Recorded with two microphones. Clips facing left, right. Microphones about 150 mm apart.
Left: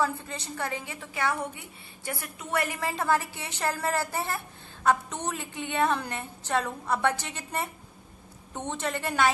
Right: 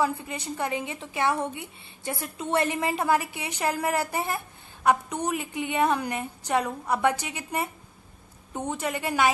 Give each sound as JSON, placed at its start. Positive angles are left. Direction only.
{"t": 0.0, "sound": "a woman's voice", "side_deg": -15}